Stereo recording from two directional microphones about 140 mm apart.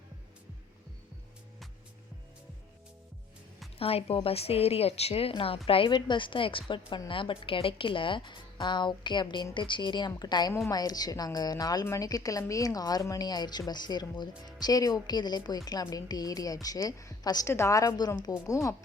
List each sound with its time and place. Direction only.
3.8 s a woman's voice: 45° left (ahead or behind); by 18.8 s 20° left (ahead or behind)